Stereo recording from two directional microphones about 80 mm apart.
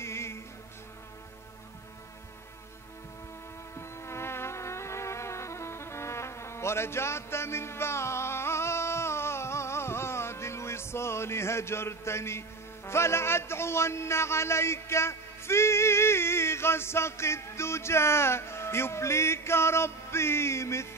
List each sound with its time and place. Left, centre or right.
0.0 s music: left
3.7 s music: left